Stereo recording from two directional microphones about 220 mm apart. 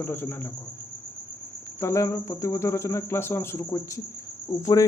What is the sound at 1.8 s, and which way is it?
Speech, 15° left (ahead or behind).